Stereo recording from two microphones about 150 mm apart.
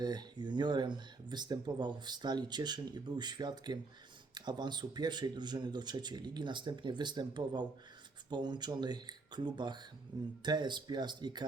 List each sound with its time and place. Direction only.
0.0 s speech: 30° right (ahead or behind)